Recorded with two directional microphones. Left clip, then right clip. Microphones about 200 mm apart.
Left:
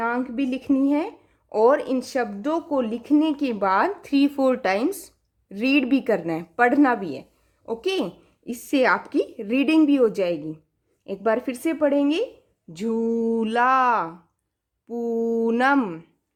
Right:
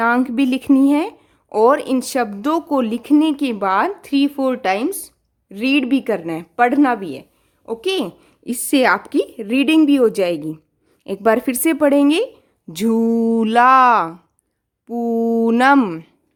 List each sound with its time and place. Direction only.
0.0 s speech: 40° right (ahead or behind)